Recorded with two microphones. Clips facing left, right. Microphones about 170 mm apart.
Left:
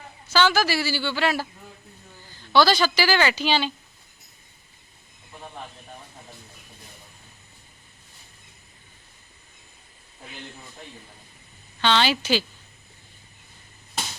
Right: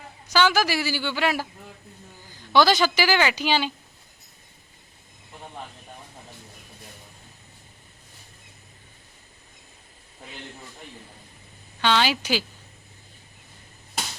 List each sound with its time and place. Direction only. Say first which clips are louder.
0.3 s a woman's voice: even; 15° right (ahead or behind)
11.8 s a woman's voice: even; 10° right (ahead or behind)